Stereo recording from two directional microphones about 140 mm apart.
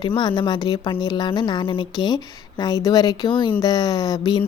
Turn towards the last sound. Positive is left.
turn(degrees=30)  # may be behind; listen again after turning